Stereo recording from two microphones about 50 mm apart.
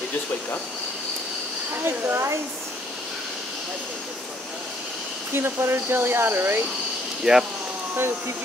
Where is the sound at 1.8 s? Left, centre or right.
Right.